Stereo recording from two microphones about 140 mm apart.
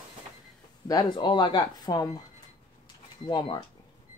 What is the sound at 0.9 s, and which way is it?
Speech, 30° left (ahead or behind).